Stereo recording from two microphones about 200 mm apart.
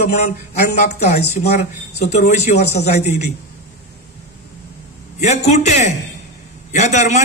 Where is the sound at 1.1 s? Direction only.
35° left (ahead or behind).